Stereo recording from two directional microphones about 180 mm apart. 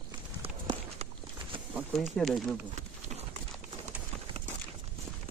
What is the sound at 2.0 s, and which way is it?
Speech, centre (ahead or behind).